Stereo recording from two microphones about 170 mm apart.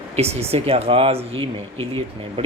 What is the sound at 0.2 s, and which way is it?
Speech, 35° right (ahead or behind).